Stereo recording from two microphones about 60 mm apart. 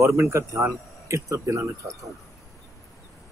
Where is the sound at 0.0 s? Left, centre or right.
Right.